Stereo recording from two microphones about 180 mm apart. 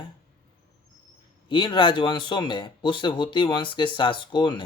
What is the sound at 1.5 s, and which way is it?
Speech, 25° left (ahead or behind).